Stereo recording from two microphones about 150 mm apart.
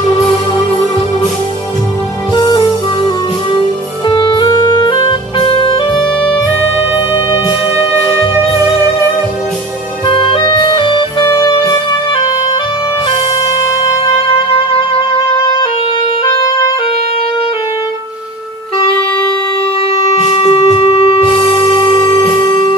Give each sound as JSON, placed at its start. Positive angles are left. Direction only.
{"t": 2.3, "sound": "music", "side_deg": 30}
{"t": 4.1, "sound": "music", "side_deg": 30}
{"t": 7.7, "sound": "music", "side_deg": -15}
{"t": 10.0, "sound": "music", "side_deg": 35}
{"t": 20.3, "sound": "shofar", "side_deg": 40}
{"t": 21.9, "sound": "music", "side_deg": 25}